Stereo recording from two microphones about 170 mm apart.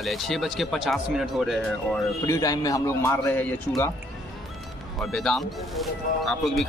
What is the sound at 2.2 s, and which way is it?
A man's voice, 20° left (ahead or behind).